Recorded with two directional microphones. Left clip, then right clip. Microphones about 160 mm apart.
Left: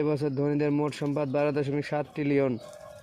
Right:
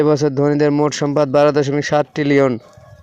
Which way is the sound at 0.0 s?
35° right (ahead or behind).